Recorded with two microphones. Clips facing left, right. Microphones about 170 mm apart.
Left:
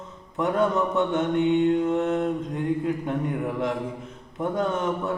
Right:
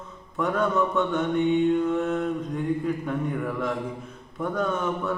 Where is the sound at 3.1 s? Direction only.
25° left (ahead or behind).